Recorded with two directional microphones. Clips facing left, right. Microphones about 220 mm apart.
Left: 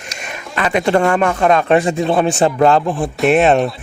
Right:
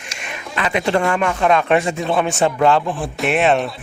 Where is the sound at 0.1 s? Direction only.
45° left (ahead or behind).